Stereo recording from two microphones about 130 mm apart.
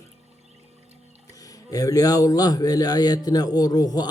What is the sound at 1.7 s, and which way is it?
A man's voice, 30° left (ahead or behind).